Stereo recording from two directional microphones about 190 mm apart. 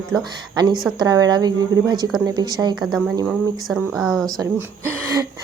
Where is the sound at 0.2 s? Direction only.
20° right (ahead or behind).